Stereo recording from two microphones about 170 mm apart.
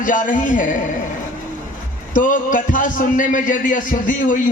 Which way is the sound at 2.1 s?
50° left (ahead or behind).